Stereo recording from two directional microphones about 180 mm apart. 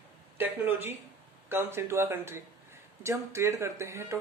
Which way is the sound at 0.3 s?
15° right (ahead or behind).